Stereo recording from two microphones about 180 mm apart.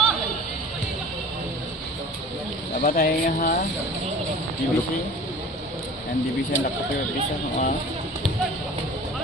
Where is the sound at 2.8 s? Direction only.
55° left (ahead or behind).